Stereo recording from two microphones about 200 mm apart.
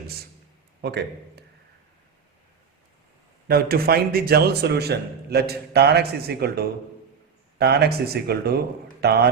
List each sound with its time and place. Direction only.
0.8 s a man's voice: 55° right (ahead or behind)
3.5 s a man's voice: 50° right (ahead or behind)